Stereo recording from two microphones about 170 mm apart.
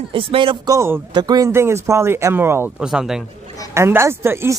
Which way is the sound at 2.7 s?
5° right (ahead or behind).